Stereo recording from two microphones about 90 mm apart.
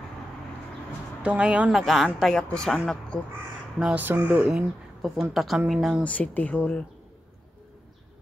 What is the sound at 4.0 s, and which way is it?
Speech, 20° right (ahead or behind).